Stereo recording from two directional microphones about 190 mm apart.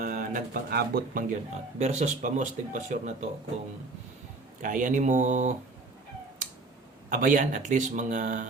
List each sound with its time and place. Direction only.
0.0 s speech: 45° right (ahead or behind)
1.8 s speech: 35° right (ahead or behind)
4.6 s speech: 45° right (ahead or behind)
7.1 s speech: 45° right (ahead or behind)